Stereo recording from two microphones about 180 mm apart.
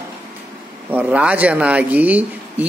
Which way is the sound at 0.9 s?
10° right (ahead or behind).